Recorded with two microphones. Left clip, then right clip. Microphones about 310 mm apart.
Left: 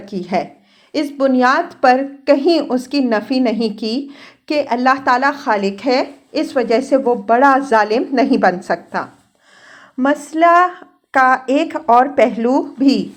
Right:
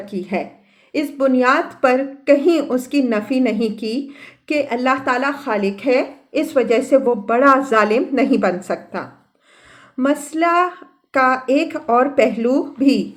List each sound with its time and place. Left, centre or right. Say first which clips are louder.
0.1 s a woman's voice: left 5 dB; left